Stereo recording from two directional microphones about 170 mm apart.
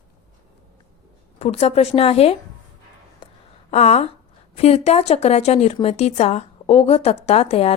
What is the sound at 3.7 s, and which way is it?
A woman's voice, 40° left (ahead or behind).